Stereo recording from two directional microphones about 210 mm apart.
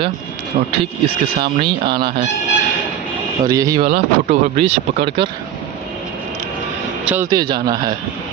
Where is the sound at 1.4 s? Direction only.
25° right (ahead or behind).